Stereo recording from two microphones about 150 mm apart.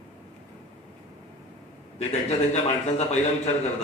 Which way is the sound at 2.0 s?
45° left (ahead or behind).